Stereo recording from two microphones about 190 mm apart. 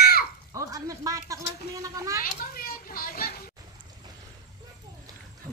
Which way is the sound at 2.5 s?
50° left (ahead or behind).